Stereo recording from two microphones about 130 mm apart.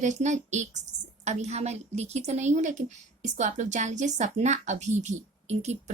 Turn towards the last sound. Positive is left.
turn(degrees=-55)  # may be behind; listen again after turning